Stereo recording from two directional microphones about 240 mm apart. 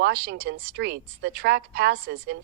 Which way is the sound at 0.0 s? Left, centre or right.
Right.